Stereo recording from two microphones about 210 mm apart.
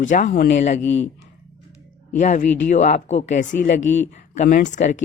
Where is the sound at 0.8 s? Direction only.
60° left (ahead or behind).